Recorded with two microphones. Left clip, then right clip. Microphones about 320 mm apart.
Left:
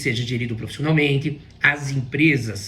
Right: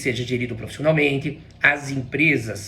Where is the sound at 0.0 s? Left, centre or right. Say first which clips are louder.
Right 1 dB; centre.